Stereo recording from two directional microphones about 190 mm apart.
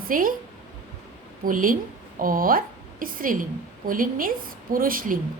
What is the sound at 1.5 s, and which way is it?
A woman's voice, 45° right (ahead or behind).